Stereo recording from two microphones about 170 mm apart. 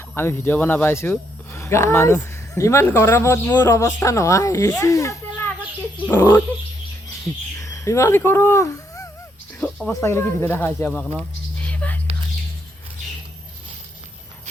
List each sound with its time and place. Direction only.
0.1 s speech: 15° left (ahead or behind)
7.6 s speech: 20° left (ahead or behind)
11.2 s a sound: 10° left (ahead or behind)